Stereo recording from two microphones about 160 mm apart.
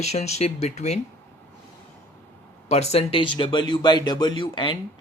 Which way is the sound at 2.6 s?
40° left (ahead or behind).